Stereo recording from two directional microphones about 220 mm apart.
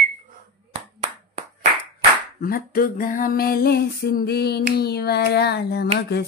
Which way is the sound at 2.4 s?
40° left (ahead or behind).